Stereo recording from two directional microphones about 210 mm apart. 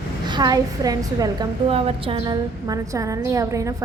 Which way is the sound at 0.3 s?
20° right (ahead or behind).